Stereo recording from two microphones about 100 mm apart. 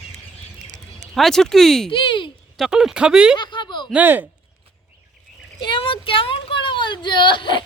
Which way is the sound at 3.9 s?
20° right (ahead or behind).